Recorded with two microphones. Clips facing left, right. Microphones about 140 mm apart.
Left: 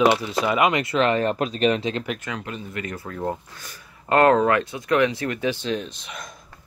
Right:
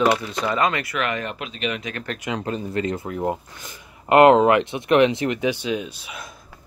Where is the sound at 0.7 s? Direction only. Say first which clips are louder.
Left 5 dB; 25° left (ahead or behind).